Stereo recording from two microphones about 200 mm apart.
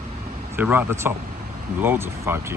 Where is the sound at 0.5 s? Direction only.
10° right (ahead or behind).